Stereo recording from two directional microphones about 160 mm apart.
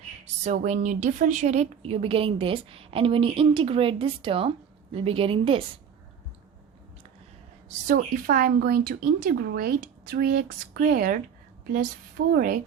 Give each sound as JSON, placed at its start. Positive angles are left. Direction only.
{"t": 0.4, "sound": "a woman's voice", "side_deg": -50}
{"t": 7.9, "sound": "speech", "side_deg": -60}